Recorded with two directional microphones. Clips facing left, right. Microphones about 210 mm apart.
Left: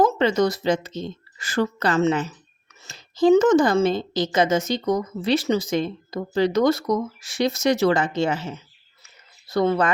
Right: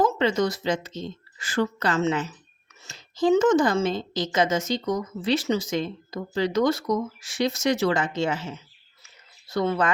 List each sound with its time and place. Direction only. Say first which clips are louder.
0.0 s speech: left 3 dB; 40° left (ahead or behind)
9.5 s speech: left 4 dB; 40° left (ahead or behind)